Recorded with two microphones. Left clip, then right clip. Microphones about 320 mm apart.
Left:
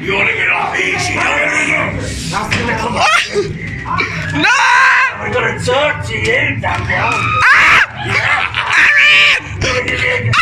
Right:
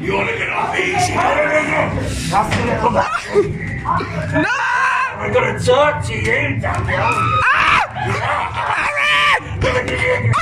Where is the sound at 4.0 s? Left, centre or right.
Centre.